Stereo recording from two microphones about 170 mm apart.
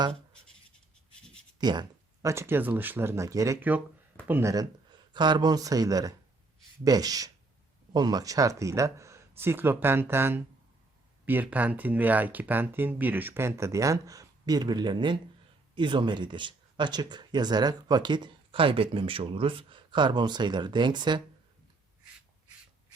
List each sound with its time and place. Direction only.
1.5 s speech: 25° right (ahead or behind)